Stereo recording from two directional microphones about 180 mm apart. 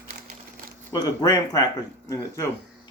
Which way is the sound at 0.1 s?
55° right (ahead or behind).